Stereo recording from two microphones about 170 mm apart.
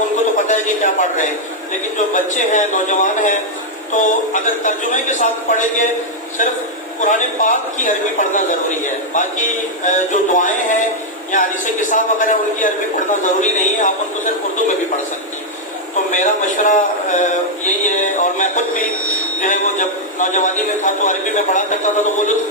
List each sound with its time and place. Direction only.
0.3 s a man's voice: 45° left (ahead or behind)
16.1 s a man's voice: 50° left (ahead or behind)